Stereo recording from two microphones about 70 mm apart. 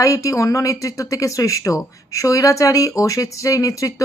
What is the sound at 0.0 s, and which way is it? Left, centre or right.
Speech, left.